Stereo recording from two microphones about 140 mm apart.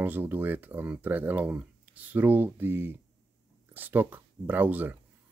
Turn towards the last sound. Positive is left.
turn(degrees=-10)  # may be behind; listen again after turning